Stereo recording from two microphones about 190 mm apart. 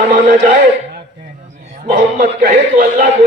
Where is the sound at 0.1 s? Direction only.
50° right (ahead or behind).